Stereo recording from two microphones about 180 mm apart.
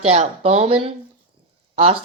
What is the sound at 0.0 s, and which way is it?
Speech, 35° right (ahead or behind).